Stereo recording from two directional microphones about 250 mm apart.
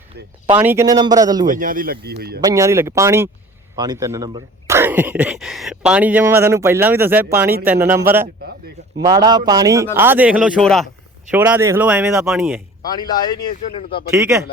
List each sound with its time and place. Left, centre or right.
0.5 s speech: centre
1.5 s speech: right
2.4 s a man's voice: centre
12.8 s a man's voice: centre
14.1 s speech: centre